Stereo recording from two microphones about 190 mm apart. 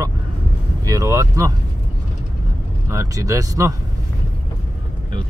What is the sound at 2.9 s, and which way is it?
Speech, 15° right (ahead or behind).